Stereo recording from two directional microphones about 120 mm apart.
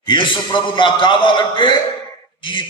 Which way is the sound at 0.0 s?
45° left (ahead or behind).